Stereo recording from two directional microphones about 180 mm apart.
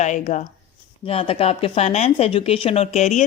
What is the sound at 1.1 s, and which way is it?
Speech, 30° left (ahead or behind).